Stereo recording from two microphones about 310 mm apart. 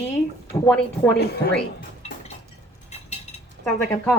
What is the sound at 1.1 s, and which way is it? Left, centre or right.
Speech, left.